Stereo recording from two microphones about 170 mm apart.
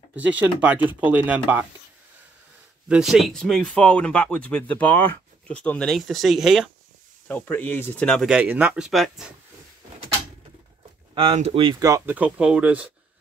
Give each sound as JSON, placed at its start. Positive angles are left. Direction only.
{"t": 0.1, "sound": "speech", "side_deg": -10}
{"t": 2.9, "sound": "speech", "side_deg": -5}
{"t": 7.2, "sound": "speech", "side_deg": 10}
{"t": 8.3, "sound": "speech", "side_deg": -10}
{"t": 11.1, "sound": "speech", "side_deg": -35}
{"t": 11.8, "sound": "speech", "side_deg": -20}
{"t": 12.2, "sound": "speech", "side_deg": -5}